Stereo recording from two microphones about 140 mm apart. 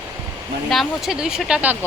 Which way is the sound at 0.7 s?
Centre (ahead or behind).